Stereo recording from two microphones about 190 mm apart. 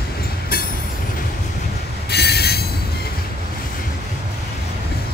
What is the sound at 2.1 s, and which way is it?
Train wheels squealing, 60° left (ahead or behind).